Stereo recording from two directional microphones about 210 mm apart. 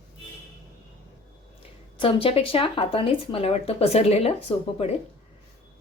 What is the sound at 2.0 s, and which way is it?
Speech, 25° left (ahead or behind).